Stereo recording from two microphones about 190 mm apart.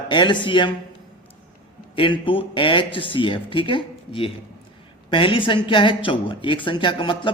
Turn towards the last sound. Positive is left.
turn(degrees=25)  # may be behind; listen again after turning